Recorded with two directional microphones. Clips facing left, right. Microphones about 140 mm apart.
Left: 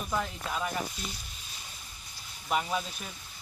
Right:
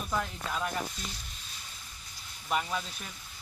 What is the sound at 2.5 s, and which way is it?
Speech, 15° left (ahead or behind).